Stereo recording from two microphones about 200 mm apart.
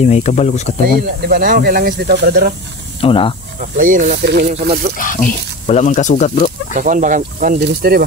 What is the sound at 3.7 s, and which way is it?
Speech, 40° right (ahead or behind).